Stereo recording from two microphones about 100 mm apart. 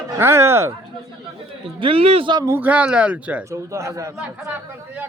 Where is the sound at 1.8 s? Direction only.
70° right (ahead or behind).